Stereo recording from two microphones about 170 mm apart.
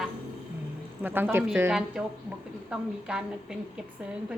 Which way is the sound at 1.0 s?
10° right (ahead or behind).